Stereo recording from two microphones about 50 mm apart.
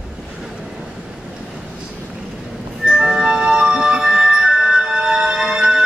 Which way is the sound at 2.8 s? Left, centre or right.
Centre.